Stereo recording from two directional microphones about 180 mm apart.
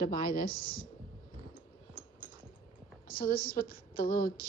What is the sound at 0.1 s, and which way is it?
Speech, 55° left (ahead or behind).